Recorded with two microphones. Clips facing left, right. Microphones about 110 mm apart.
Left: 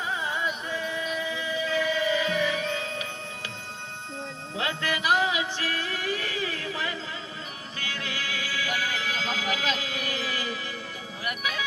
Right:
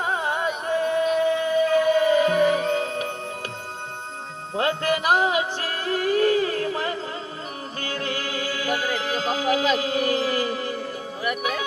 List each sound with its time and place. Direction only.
0.0 s music: 55° right (ahead or behind)
4.5 s music: 45° right (ahead or behind)